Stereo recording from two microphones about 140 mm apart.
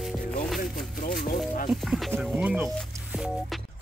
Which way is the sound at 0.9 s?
80° left.